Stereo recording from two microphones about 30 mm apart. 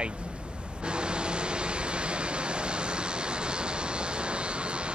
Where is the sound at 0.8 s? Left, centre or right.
Right.